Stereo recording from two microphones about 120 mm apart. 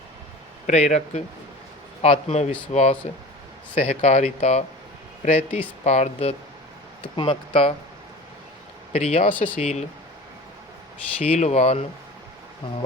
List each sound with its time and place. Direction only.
0.7 s speech: 75° left (ahead or behind)
2.0 s speech: 55° left (ahead or behind)
7.2 s speech: 50° left (ahead or behind)
8.9 s speech: 60° left (ahead or behind)
9.3 s speech: 15° left (ahead or behind)
9.6 s speech: 75° left (ahead or behind)
11.2 s speech: 65° left (ahead or behind)